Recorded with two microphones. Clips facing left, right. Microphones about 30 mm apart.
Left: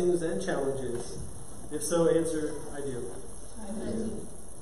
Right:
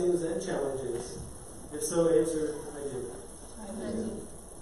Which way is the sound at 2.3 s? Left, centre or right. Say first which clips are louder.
Right 1 dB; centre.